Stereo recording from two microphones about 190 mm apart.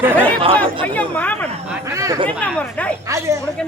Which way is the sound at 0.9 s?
10° left (ahead or behind).